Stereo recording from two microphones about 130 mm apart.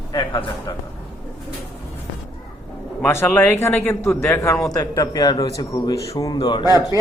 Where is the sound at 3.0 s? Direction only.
15° left (ahead or behind).